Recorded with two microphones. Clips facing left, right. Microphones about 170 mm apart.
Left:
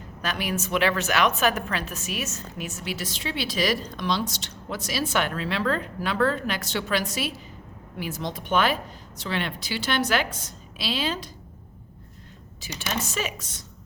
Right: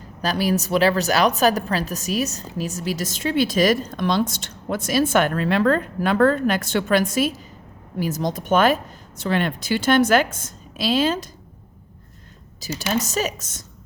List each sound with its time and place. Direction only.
0.2 s a woman's voice: 35° right (ahead or behind)
12.5 s a woman's voice: 40° right (ahead or behind)